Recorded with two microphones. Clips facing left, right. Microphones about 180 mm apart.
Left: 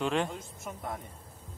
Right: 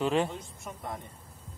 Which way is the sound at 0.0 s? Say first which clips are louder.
Right 2 dB; 5° right (ahead or behind).